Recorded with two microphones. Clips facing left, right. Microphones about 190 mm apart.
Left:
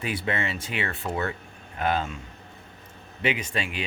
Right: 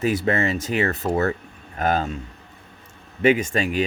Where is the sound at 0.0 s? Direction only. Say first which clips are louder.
Right 8 dB; 40° right (ahead or behind).